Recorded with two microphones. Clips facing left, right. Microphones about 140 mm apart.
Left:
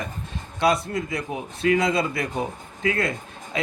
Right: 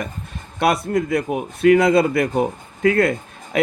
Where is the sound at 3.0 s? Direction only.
60° right (ahead or behind).